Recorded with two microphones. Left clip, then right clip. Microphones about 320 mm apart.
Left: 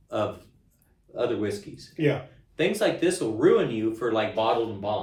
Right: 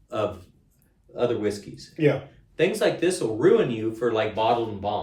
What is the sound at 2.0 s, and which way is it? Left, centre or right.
Speech, centre.